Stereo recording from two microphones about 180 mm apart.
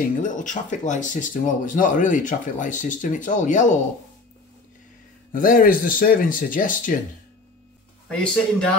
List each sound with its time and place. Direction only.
0.2 s speech: 45° left (ahead or behind)
5.3 s speech: 50° left (ahead or behind)
8.1 s a man's voice: 5° left (ahead or behind)